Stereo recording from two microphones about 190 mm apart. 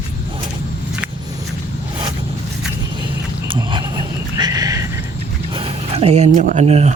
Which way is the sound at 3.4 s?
25° right (ahead or behind).